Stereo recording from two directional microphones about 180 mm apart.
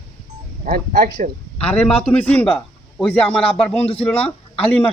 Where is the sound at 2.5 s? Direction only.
30° left (ahead or behind).